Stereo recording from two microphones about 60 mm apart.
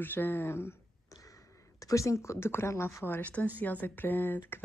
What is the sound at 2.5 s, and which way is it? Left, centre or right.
Speech, left.